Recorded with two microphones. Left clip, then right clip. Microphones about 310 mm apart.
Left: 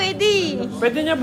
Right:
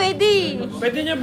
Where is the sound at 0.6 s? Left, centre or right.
Left.